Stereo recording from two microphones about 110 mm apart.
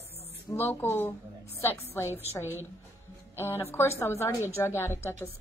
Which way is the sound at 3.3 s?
20° left (ahead or behind).